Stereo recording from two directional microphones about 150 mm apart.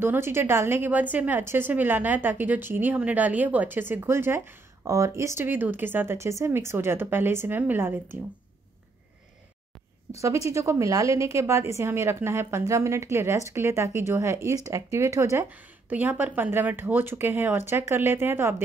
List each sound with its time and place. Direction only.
0.0 s a woman's voice: 15° right (ahead or behind)
10.1 s a woman's voice: 20° right (ahead or behind)